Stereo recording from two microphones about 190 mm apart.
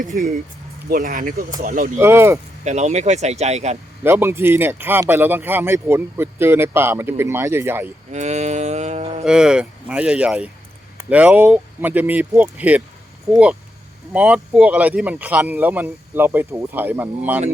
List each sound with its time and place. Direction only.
0.0 s speech: 55° right (ahead or behind)
2.0 s speech: 15° right (ahead or behind)
2.6 s livestock: 35° right (ahead or behind)
4.0 s speech: 15° right (ahead or behind)
8.1 s livestock: 35° right (ahead or behind)
9.2 s speech: 5° right (ahead or behind)